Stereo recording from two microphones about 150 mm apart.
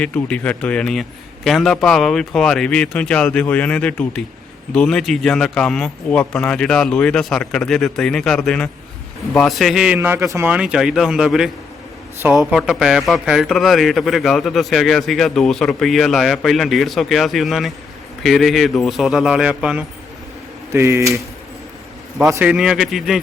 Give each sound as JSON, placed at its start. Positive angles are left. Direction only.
{"t": 0.0, "sound": "a man's voice", "side_deg": 10}
{"t": 10.5, "sound": "a man's voice", "side_deg": -5}
{"t": 20.7, "sound": "speech", "side_deg": -20}
{"t": 22.3, "sound": "a man's voice", "side_deg": -10}